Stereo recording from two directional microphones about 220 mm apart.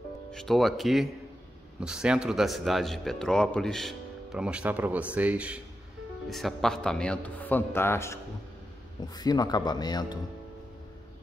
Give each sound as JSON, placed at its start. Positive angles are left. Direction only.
{"t": 0.3, "sound": "speech", "side_deg": 0}